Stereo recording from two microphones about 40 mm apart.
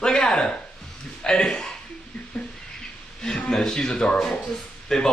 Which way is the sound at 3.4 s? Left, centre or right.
Centre.